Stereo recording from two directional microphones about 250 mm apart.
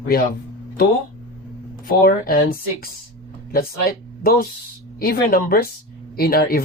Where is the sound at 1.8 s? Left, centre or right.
Left.